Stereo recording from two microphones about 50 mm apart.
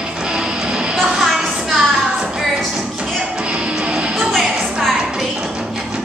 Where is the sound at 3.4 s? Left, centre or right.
Right.